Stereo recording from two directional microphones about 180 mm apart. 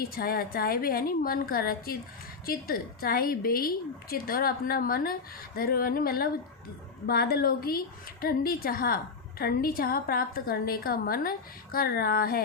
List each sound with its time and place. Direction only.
0.0 s a woman's voice: 55° left (ahead or behind)